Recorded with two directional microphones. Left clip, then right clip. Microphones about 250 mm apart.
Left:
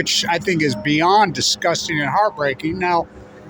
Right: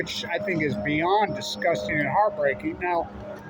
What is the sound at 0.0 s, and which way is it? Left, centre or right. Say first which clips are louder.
Speech: left 9 dB; left.